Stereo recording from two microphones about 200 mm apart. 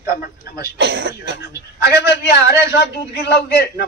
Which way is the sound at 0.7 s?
60° right (ahead or behind).